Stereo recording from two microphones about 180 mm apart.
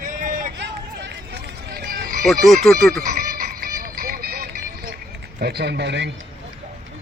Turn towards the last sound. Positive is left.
turn(degrees=-75)  # may be behind; listen again after turning